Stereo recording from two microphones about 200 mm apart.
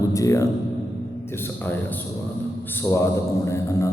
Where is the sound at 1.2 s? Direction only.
10° left (ahead or behind).